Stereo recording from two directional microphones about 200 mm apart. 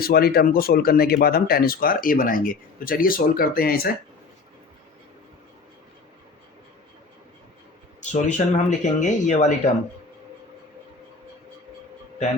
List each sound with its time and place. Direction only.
0.0 s speech: 50° left (ahead or behind)
8.1 s speech: 35° left (ahead or behind)